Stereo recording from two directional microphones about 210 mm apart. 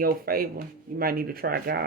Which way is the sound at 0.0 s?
45° right (ahead or behind).